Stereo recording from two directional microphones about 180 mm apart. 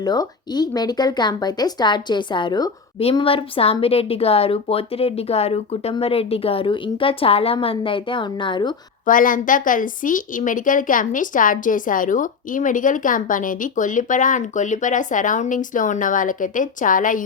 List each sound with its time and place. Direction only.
0.0 s speech: 20° left (ahead or behind)
3.0 s speech: 30° left (ahead or behind)
9.0 s a woman's voice: 50° left (ahead or behind)